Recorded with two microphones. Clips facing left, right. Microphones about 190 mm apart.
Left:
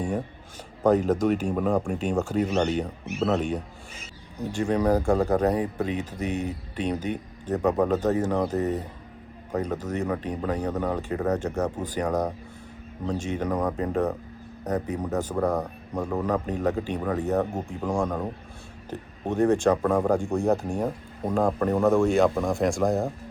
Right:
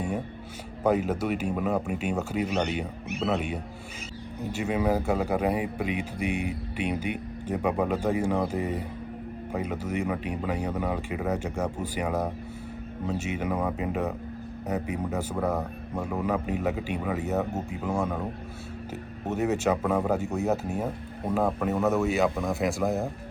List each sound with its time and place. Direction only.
0.9 s speech: 10° right (ahead or behind)